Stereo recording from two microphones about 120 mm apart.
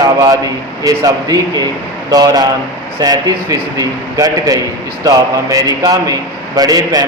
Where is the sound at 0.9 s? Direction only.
30° right (ahead or behind).